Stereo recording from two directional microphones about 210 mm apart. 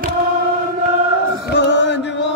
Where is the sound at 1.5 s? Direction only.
55° left (ahead or behind).